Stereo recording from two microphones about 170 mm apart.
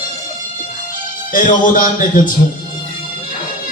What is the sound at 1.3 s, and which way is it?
Speech, 50° left (ahead or behind).